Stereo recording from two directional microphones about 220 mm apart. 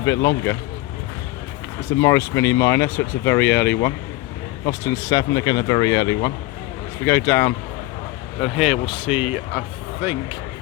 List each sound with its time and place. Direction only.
0.0 s speech: 15° left (ahead or behind)
2.0 s speech: 15° left (ahead or behind)
8.4 s speech: centre (ahead or behind)